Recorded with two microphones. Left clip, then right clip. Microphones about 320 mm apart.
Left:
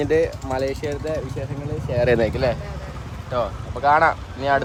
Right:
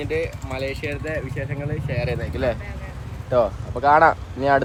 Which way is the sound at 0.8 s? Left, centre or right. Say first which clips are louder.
Left 2 dB; centre.